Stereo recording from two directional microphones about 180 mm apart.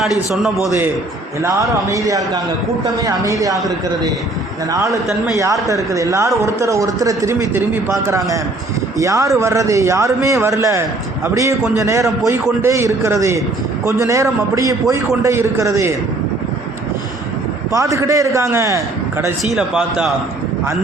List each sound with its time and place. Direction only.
1.4 s speech: 15° right (ahead or behind)
4.7 s speech: 20° right (ahead or behind)
5.0 s a man's voice: centre (ahead or behind)
5.6 s speech: 20° right (ahead or behind)
17.7 s speech: 15° right (ahead or behind)
19.5 s a man's voice: centre (ahead or behind)